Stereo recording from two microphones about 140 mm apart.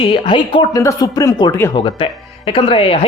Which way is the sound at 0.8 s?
25° left (ahead or behind).